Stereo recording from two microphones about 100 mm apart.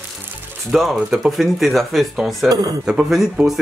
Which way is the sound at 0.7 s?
Centre (ahead or behind).